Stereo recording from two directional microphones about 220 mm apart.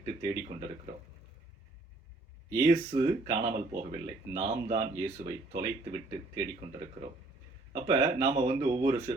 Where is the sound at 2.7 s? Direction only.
25° right (ahead or behind).